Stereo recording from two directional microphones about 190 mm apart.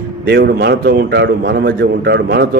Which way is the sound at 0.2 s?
55° right (ahead or behind).